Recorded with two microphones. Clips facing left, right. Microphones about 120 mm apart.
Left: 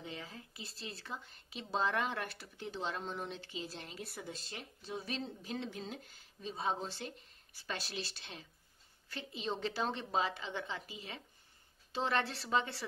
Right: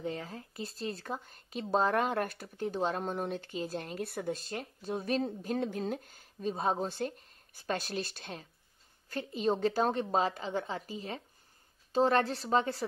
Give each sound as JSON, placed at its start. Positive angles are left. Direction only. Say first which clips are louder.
{"t": 0.0, "sound": "a woman's voice", "louder": "right 9 dB", "side_deg": -45}